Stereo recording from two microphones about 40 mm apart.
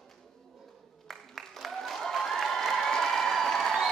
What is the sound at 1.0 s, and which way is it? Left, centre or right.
Applause, centre.